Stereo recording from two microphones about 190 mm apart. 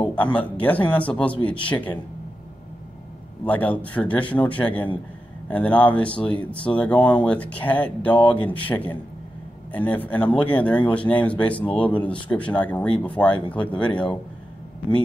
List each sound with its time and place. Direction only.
0.0 s speech: 5° left (ahead or behind)
3.4 s speech: 10° left (ahead or behind)